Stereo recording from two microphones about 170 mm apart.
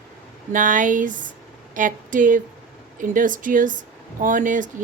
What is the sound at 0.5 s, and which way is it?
Speech, 50° right (ahead or behind).